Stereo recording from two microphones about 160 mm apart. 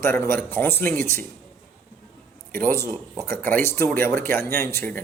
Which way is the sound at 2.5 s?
15° left (ahead or behind).